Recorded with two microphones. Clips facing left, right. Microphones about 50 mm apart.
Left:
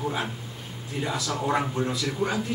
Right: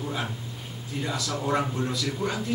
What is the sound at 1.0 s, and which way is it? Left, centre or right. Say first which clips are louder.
A man's voice: left 2 dB; centre.